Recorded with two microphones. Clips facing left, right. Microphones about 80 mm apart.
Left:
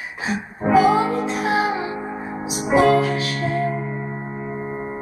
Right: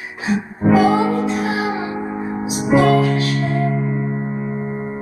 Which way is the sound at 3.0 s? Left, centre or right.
Centre.